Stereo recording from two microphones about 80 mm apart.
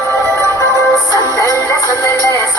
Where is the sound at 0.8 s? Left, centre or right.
Left.